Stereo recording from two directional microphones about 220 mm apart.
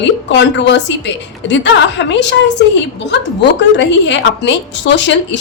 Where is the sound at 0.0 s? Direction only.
55° left (ahead or behind).